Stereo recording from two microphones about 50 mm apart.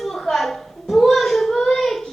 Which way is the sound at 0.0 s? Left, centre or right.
Centre.